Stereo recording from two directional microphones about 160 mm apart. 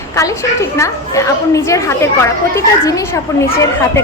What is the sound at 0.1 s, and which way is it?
A woman's voice, 20° left (ahead or behind).